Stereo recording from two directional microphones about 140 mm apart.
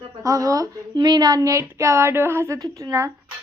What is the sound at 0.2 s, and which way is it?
A woman's voice, 25° right (ahead or behind).